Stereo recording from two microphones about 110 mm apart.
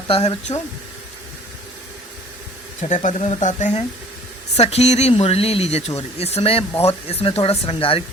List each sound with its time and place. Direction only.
0.1 s speech: 70° left (ahead or behind)
2.8 s speech: 90° left
5.1 s speech: 65° left (ahead or behind)